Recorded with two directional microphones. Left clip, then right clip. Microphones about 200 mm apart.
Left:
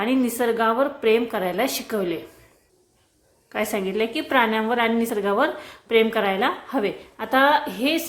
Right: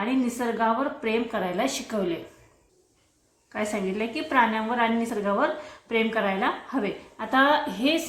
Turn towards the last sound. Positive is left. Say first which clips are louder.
# left 2 dB
turn(degrees=25)  # may be behind; listen again after turning